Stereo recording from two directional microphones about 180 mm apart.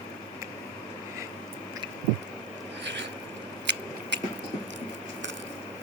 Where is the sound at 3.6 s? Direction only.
75° right (ahead or behind).